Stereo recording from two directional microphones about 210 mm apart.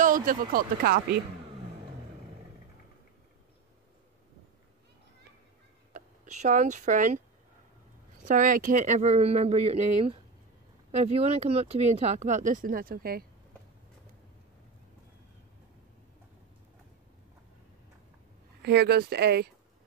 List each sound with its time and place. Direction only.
0.0 s speech: 40° right (ahead or behind)
5.9 s speech: 35° right (ahead or behind)
8.2 s speech: 40° right (ahead or behind)
18.6 s speech: 50° right (ahead or behind)